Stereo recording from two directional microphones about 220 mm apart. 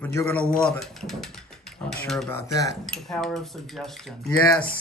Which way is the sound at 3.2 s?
Centre (ahead or behind).